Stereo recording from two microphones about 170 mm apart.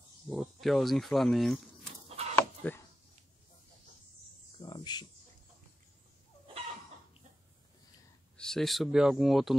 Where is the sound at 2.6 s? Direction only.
10° left (ahead or behind).